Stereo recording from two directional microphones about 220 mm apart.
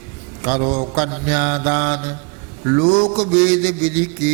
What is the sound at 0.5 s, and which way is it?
Mantra, 30° right (ahead or behind).